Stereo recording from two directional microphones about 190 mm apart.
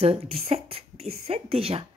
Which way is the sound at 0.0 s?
30° right (ahead or behind).